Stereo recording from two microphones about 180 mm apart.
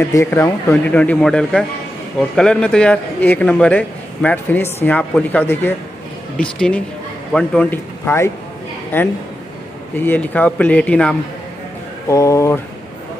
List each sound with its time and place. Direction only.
0.0 s speech: 15° left (ahead or behind)
12.1 s speech: 15° left (ahead or behind)